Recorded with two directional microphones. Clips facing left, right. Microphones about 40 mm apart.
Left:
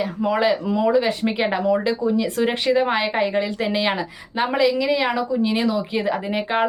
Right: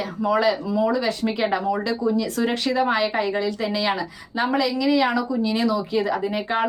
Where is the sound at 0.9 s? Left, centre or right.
Left.